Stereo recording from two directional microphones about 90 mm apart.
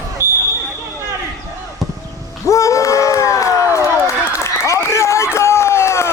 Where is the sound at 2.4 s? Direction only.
35° left (ahead or behind).